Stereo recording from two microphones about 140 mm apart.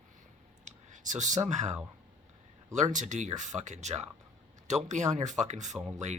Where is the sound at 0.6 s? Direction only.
60° right (ahead or behind).